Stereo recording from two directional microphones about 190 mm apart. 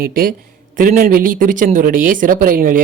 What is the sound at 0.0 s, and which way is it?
Speech, 45° right (ahead or behind).